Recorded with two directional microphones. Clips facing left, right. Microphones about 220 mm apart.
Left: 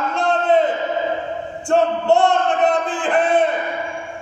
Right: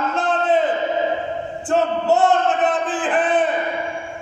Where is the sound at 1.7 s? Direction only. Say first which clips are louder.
Left 2 dB; 5° right (ahead or behind).